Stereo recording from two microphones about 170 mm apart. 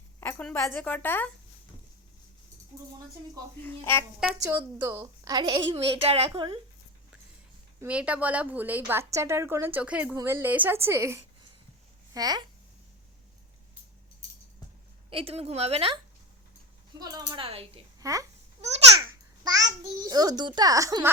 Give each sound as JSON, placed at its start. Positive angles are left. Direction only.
{"t": 0.2, "sound": "a woman's voice", "side_deg": 10}
{"t": 3.6, "sound": "a woman's voice", "side_deg": 15}
{"t": 4.2, "sound": "a woman's voice", "side_deg": -5}
{"t": 4.8, "sound": "a woman's voice", "side_deg": -20}
{"t": 7.8, "sound": "a woman's voice", "side_deg": -10}
{"t": 15.1, "sound": "speech", "side_deg": -35}
{"t": 17.0, "sound": "speech", "side_deg": -20}
{"t": 18.0, "sound": "a child's voice", "side_deg": -20}